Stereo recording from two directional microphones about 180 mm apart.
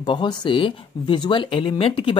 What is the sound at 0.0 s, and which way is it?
Speech, 25° left (ahead or behind).